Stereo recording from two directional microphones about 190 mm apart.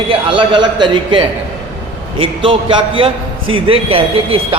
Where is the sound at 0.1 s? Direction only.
25° right (ahead or behind).